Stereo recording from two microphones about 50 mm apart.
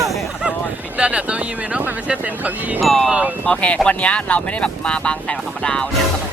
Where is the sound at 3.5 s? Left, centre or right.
Left.